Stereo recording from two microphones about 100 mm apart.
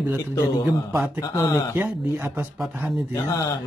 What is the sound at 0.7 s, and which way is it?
Speech, 20° right (ahead or behind).